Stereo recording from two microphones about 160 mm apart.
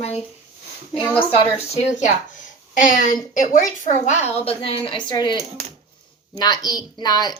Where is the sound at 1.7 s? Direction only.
45° left (ahead or behind); by 5.4 s 30° left (ahead or behind).